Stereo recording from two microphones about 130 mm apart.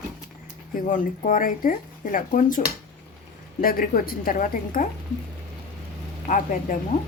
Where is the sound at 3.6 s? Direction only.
90° left.